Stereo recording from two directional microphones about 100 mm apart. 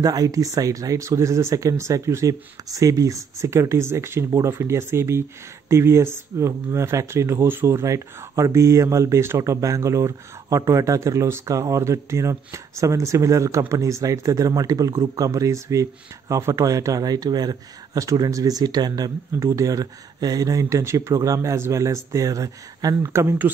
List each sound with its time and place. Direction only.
0.0 s speech: 35° right (ahead or behind); by 23.5 s 20° right (ahead or behind)